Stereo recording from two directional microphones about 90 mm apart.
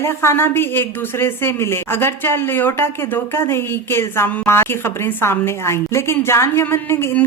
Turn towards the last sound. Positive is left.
turn(degrees=25)  # may be behind; listen again after turning